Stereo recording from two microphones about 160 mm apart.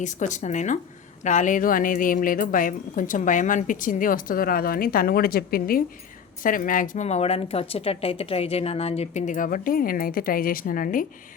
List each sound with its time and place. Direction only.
0.0 s a woman's voice: 50° left (ahead or behind)